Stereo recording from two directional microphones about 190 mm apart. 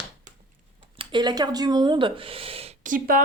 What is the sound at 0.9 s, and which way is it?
Speech, 25° right (ahead or behind).